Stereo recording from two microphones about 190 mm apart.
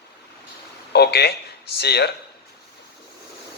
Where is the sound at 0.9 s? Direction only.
60° left (ahead or behind).